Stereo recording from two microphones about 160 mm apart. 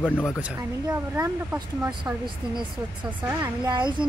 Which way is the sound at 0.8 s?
15° right (ahead or behind).